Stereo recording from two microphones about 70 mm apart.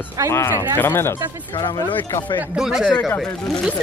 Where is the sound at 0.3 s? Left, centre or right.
Left.